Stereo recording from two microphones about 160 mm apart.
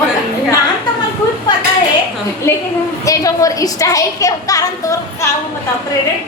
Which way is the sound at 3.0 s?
20° left (ahead or behind).